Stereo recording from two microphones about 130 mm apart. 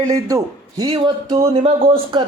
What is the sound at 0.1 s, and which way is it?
Speech, 30° right (ahead or behind).